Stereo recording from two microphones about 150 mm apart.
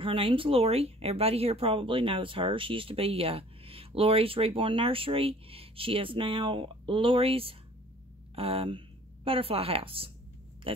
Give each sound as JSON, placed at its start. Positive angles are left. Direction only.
{"t": 0.0, "sound": "a woman's voice", "side_deg": -35}